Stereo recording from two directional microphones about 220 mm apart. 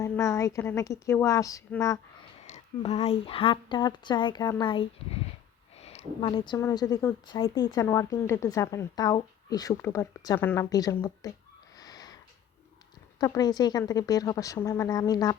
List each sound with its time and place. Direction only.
0.0 s speech: 15° left (ahead or behind)
2.5 s a woman's voice: 30° left (ahead or behind)
11.8 s a sound: 15° left (ahead or behind)
13.1 s speech: 15° left (ahead or behind)